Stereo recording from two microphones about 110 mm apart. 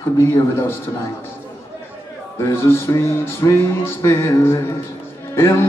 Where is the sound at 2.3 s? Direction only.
20° left (ahead or behind).